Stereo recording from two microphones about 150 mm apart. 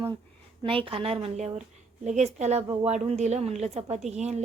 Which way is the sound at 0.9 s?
40° right (ahead or behind).